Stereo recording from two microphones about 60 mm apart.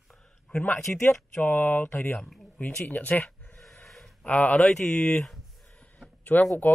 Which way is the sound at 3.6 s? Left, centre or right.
Centre.